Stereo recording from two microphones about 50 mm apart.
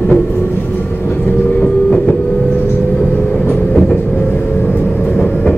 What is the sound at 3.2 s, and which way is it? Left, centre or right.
Vehicle, left.